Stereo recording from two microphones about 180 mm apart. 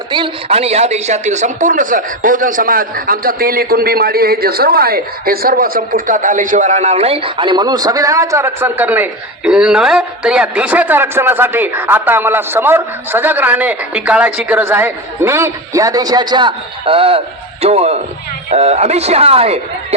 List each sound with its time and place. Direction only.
0.1 s a man's voice: 30° right (ahead or behind)